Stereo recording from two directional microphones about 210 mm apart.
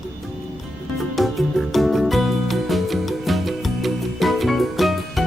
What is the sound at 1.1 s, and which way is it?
Music, centre (ahead or behind).